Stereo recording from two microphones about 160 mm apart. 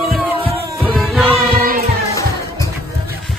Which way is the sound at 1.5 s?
65° right (ahead or behind).